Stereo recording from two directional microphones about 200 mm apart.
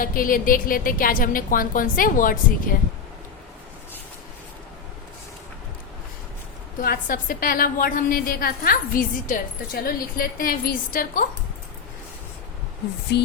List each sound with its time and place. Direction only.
0.0 s a woman's voice: 45° left (ahead or behind)
6.8 s a woman's voice: 45° left (ahead or behind)
13.1 s a sound: 55° left (ahead or behind)